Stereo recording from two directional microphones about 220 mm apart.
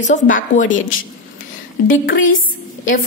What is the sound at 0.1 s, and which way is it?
Speech, 35° left (ahead or behind).